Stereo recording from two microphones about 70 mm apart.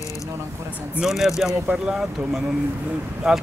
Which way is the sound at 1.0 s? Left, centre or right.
Centre.